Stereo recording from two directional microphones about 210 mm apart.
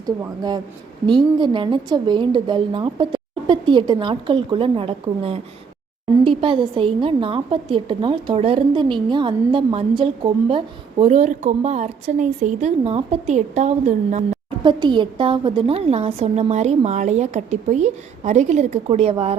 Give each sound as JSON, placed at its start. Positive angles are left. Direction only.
{"t": 0.0, "sound": "a woman's voice", "side_deg": -20}
{"t": 14.6, "sound": "a woman's voice", "side_deg": -20}